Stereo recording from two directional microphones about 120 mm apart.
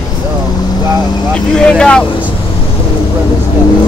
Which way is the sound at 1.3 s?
5° left (ahead or behind).